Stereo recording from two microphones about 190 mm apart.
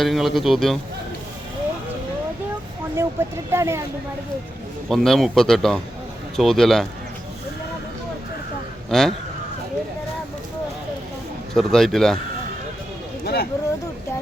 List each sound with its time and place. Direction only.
0.0 s a man's voice: centre (ahead or behind)
2.9 s speech: 15° right (ahead or behind)
4.9 s a man's voice: centre (ahead or behind)
8.9 s a man's voice: centre (ahead or behind)
11.5 s a man's voice: centre (ahead or behind)
13.2 s a sound: 55° left (ahead or behind)